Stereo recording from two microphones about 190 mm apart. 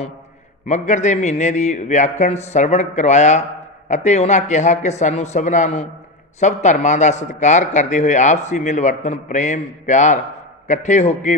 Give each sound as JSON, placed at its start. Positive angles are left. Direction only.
{"t": 0.7, "sound": "a man's voice", "side_deg": 40}